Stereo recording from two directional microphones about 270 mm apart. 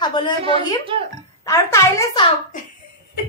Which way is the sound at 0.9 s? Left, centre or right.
Centre.